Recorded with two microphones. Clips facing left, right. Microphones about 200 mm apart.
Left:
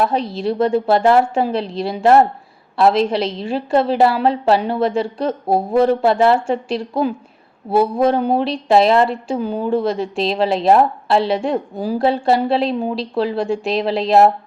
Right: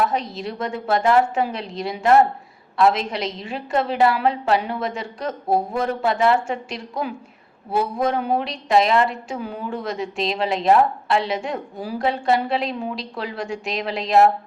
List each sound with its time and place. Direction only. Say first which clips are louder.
0.0 s a woman's voice: left 5 dB; 30° left (ahead or behind)